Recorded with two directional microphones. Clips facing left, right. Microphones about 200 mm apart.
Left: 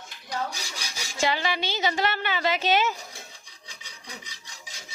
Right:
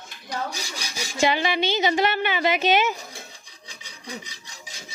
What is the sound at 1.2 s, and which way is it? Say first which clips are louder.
A woman's voice: right 4 dB; 20° right (ahead or behind).